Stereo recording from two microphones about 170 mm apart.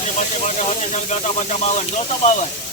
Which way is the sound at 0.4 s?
40° left (ahead or behind).